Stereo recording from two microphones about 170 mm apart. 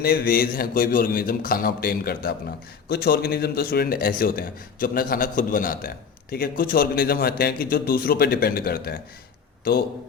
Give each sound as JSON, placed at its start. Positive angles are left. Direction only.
{"t": 0.0, "sound": "a man's voice", "side_deg": 65}